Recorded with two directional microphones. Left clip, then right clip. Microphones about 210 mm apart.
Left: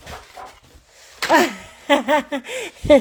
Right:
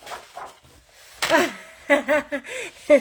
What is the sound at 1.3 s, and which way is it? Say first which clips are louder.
Speech: left 4 dB; 40° left (ahead or behind).